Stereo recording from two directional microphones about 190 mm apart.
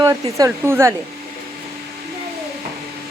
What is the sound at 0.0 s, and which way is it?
Speech, 20° right (ahead or behind).